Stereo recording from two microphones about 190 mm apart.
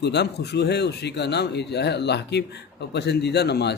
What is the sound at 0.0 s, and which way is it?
A man's voice, 60° left (ahead or behind).